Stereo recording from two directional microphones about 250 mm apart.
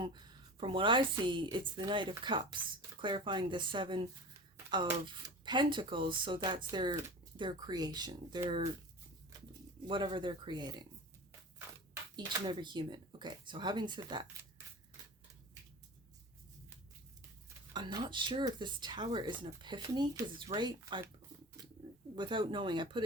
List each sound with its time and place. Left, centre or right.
0.6 s a woman's voice: centre
9.8 s a woman's voice: centre
12.1 s speech: centre
17.7 s speech: centre
22.1 s a woman's voice: centre